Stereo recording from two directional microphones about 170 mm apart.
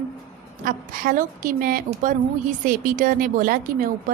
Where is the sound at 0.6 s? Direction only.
55° right (ahead or behind).